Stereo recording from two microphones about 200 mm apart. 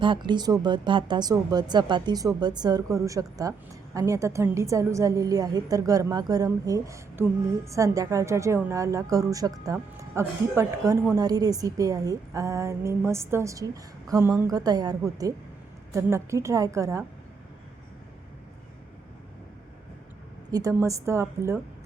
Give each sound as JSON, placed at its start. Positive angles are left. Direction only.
{"t": 0.0, "sound": "a woman's voice", "side_deg": -25}
{"t": 20.5, "sound": "a woman's voice", "side_deg": -15}